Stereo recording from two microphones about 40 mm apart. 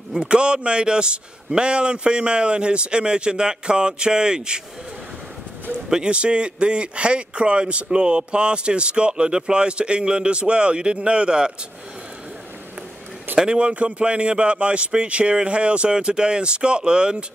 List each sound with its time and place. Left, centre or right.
0.2 s speech: right
6.0 s speech: right
13.4 s speech: right